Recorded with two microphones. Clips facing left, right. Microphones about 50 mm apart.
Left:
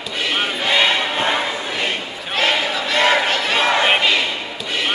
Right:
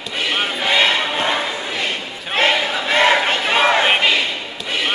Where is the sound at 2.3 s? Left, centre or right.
Right.